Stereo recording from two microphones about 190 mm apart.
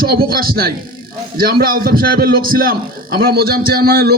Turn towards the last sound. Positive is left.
turn(degrees=-55)  # may be behind; listen again after turning